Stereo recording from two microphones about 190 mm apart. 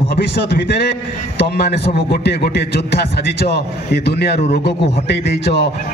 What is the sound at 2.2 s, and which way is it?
A man's voice, 60° left (ahead or behind).